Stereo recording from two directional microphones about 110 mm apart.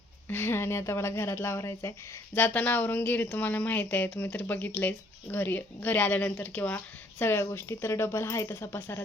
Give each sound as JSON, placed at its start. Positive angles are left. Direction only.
{"t": 0.3, "sound": "speech", "side_deg": 20}
{"t": 2.3, "sound": "a woman's voice", "side_deg": 15}